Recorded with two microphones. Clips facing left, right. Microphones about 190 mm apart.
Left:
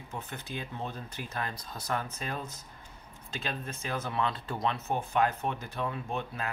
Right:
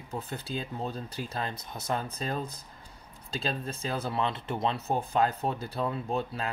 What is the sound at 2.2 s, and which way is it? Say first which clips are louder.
Speech: right 4 dB; 35° right (ahead or behind).